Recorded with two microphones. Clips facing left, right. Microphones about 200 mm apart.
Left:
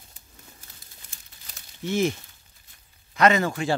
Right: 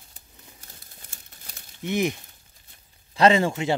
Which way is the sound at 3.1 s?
30° right (ahead or behind).